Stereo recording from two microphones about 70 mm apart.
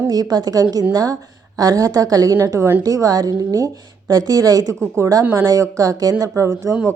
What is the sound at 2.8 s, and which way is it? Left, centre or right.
A woman's voice, right.